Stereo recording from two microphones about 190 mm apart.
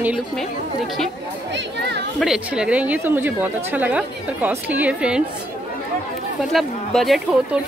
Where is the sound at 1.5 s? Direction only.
60° right (ahead or behind).